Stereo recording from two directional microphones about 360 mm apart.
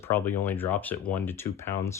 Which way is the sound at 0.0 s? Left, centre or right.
Centre.